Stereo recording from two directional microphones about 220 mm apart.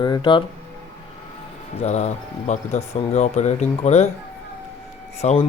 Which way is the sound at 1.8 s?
30° left (ahead or behind).